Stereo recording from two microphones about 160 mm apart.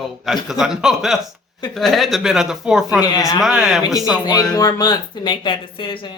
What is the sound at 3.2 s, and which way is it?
Speech, 20° left (ahead or behind).